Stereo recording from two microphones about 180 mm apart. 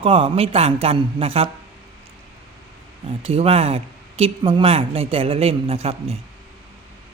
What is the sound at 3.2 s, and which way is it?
Speech, 35° right (ahead or behind).